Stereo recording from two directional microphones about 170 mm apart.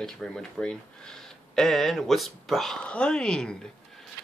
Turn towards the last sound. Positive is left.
turn(degrees=5)  # may be behind; listen again after turning